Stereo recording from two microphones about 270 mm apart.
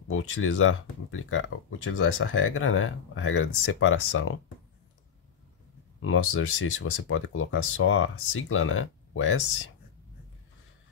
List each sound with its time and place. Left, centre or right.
0.1 s speech: left
6.0 s speech: left